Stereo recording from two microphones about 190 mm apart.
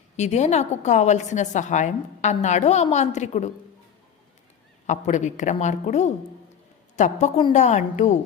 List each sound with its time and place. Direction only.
0.2 s a woman's voice: 35° left (ahead or behind)
4.9 s a woman's voice: 40° left (ahead or behind)